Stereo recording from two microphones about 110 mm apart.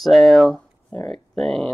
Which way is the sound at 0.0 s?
5° left (ahead or behind).